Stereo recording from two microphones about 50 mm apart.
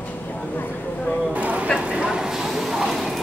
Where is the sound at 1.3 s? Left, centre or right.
Right.